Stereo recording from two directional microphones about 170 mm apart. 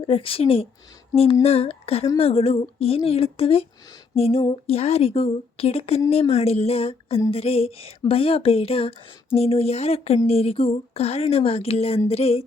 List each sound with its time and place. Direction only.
0.1 s speech: 35° left (ahead or behind)